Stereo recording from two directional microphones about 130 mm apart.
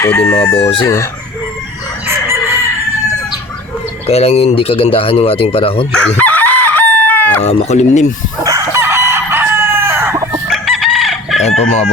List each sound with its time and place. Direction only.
0.0 s chicken: 15° left (ahead or behind)
0.5 s speech: 45° left (ahead or behind)
4.0 s speech: 55° left (ahead or behind)
5.9 s chicken: 10° left (ahead or behind)
7.4 s speech: 55° left (ahead or behind)
8.4 s chicken: 25° right (ahead or behind)
10.5 s chicken: centre (ahead or behind)
11.4 s speech: 60° left (ahead or behind)